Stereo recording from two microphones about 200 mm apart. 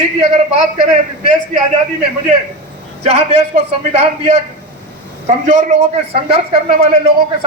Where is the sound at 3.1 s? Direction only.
35° right (ahead or behind).